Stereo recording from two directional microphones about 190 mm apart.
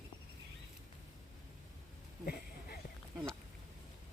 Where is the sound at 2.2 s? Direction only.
55° left (ahead or behind).